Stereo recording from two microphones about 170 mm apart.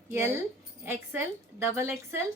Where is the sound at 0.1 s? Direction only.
15° right (ahead or behind).